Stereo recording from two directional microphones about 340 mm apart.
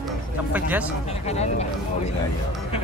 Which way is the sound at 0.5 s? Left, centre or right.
Centre.